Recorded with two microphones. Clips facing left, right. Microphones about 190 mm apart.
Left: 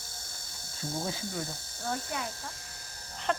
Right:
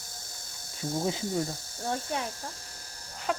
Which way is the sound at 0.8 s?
15° right (ahead or behind).